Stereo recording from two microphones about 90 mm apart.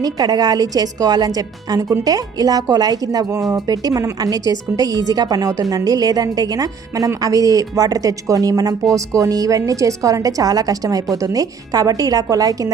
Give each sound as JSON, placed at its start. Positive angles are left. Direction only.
{"t": 0.0, "sound": "a woman's voice", "side_deg": -45}